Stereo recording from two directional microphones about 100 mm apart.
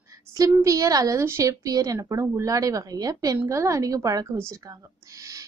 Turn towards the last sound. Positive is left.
turn(degrees=-35)  # may be behind; listen again after turning